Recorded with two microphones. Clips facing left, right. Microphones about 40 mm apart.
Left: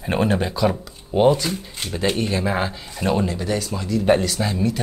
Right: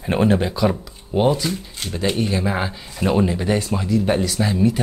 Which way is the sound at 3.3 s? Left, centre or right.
Right.